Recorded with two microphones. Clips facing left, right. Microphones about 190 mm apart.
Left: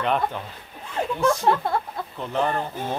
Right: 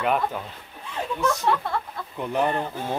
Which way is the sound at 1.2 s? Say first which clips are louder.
Left 3 dB; 35° left (ahead or behind).